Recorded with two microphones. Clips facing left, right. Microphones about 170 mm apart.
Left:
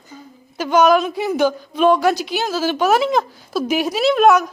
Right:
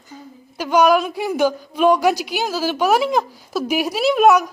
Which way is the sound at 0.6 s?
10° right (ahead or behind).